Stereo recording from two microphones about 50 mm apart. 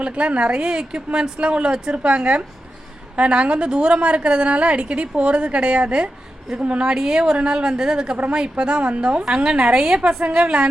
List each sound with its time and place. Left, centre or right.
0.0 s a woman's voice: right
2.0 s a woman's voice: right